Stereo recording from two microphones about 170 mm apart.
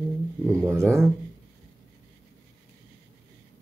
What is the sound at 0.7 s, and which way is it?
Speech, 15° right (ahead or behind).